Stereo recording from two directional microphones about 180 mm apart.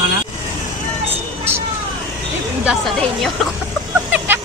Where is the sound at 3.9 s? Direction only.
10° right (ahead or behind).